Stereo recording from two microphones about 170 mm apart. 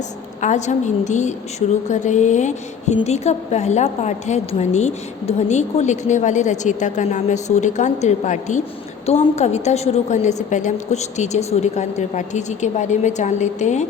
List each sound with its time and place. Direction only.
0.4 s a woman's voice: 45° left (ahead or behind)